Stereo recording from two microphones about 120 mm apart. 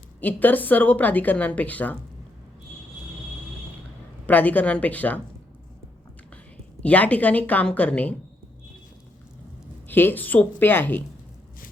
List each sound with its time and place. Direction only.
0.2 s a woman's voice: 15° left (ahead or behind)
4.3 s a woman's voice: 15° left (ahead or behind)
6.8 s a woman's voice: 10° left (ahead or behind)
9.9 s a woman's voice: 15° left (ahead or behind)